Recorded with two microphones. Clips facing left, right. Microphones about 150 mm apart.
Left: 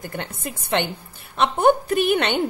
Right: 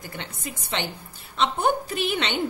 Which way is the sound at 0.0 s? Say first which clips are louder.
Left 5 dB; 55° left (ahead or behind).